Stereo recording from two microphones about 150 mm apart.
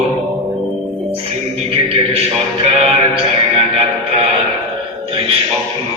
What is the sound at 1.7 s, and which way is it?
Music, 40° right (ahead or behind).